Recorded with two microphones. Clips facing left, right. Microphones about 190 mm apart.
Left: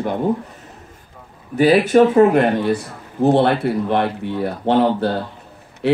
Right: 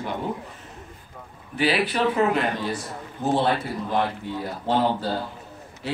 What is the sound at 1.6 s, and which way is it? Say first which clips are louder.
Speech: left 11 dB; 45° left (ahead or behind).